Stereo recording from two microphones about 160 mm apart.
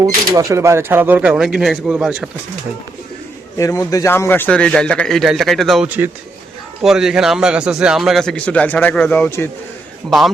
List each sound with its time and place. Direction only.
0.0 s speech: 20° right (ahead or behind); by 2.3 s 5° right (ahead or behind)
3.6 s a man's voice: 20° left (ahead or behind)
10.1 s a man's voice: centre (ahead or behind)